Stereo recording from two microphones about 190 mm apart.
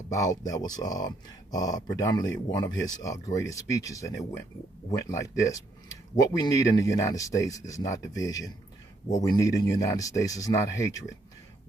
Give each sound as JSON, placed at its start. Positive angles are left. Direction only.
{"t": 0.1, "sound": "speech", "side_deg": 20}